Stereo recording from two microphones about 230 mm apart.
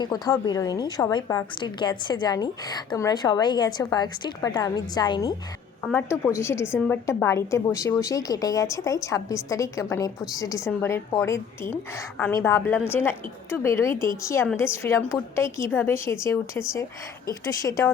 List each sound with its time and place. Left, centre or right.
0.0 s a woman's voice: centre
5.8 s a woman's voice: centre